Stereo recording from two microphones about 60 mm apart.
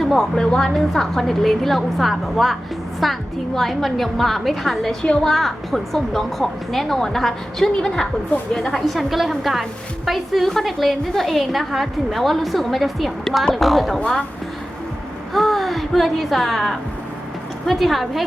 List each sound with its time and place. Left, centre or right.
0.0 s a woman's voice: centre
14.0 s speech: centre
15.3 s a woman's voice: centre